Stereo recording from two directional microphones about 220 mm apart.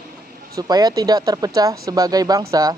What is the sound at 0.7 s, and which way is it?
Speech, 15° right (ahead or behind).